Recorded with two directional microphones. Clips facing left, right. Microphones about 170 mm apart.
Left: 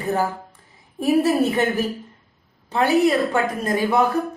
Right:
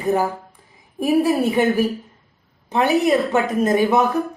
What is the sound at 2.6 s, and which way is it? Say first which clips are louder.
A woman's voice: even; 20° right (ahead or behind).